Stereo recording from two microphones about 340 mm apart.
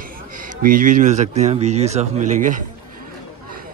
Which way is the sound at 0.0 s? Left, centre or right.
Right.